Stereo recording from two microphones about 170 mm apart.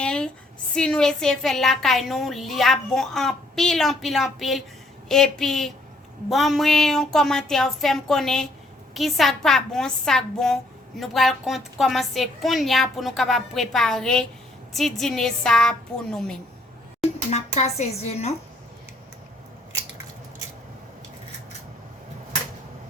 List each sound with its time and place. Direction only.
0.0 s a sound: 5° left (ahead or behind)
0.7 s a woman's voice: 5° left (ahead or behind)
17.3 s speech: 40° left (ahead or behind)